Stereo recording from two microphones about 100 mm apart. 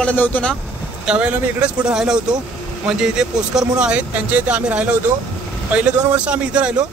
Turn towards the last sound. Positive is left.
turn(degrees=-10)  # may be behind; listen again after turning